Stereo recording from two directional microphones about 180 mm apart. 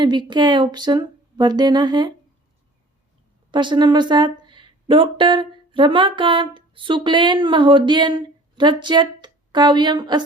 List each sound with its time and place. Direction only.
0.0 s speech: 25° right (ahead or behind)
3.5 s speech: 25° right (ahead or behind)